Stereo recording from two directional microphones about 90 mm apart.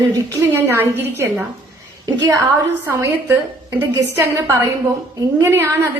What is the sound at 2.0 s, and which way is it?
Speech, 40° right (ahead or behind).